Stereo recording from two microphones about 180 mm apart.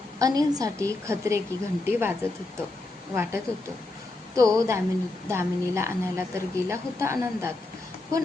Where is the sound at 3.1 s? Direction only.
15° right (ahead or behind).